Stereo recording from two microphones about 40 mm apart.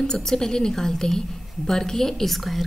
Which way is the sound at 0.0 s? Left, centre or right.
Centre.